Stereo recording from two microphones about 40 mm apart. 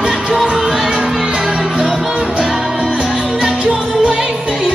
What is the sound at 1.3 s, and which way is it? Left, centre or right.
Music, right.